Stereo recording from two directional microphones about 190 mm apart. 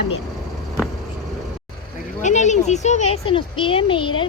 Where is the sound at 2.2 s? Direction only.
40° left (ahead or behind).